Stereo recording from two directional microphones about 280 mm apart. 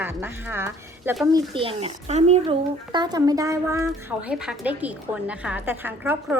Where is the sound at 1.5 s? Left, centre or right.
Right.